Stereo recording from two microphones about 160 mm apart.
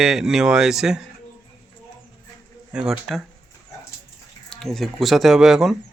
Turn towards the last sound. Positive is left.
turn(degrees=-5)  # may be behind; listen again after turning